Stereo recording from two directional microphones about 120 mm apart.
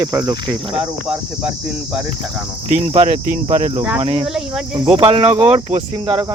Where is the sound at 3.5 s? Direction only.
85° right.